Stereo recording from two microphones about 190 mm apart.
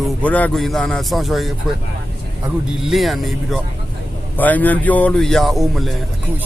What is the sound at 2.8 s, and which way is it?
A man's voice, centre (ahead or behind).